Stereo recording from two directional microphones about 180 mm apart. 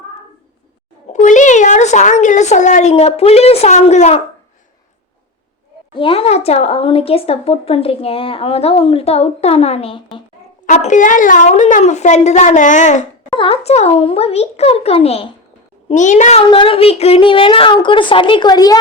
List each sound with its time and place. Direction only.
1.1 s speech: 45° left (ahead or behind)
5.9 s speech: 30° left (ahead or behind)
10.7 s speech: 45° left (ahead or behind)
13.3 s a woman's voice: 30° left (ahead or behind)